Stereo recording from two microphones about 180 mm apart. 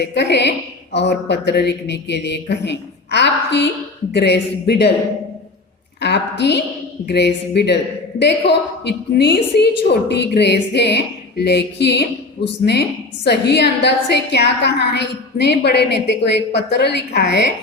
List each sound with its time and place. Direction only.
0.0 s a woman's voice: 70° left (ahead or behind)
6.0 s a woman's voice: 70° left (ahead or behind)
13.2 s a woman's voice: 70° left (ahead or behind)